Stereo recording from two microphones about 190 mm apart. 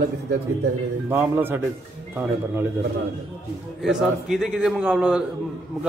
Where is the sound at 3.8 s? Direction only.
Centre (ahead or behind).